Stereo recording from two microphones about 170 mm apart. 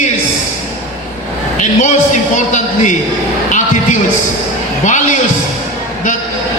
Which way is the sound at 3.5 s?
45° left (ahead or behind).